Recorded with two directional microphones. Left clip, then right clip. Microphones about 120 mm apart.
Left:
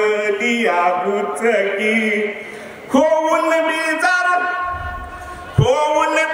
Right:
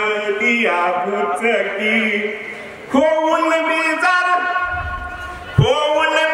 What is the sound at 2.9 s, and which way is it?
Speech, 20° left (ahead or behind).